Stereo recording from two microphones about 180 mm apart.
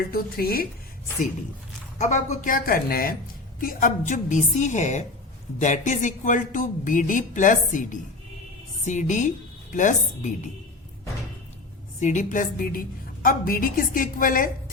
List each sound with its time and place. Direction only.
0.1 s speech: 55° left (ahead or behind)
2.0 s speech: 40° left (ahead or behind)
11.9 s speech: 45° left (ahead or behind)